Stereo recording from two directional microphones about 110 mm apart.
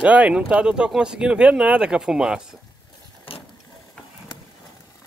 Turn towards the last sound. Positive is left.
turn(degrees=55)  # may be behind; listen again after turning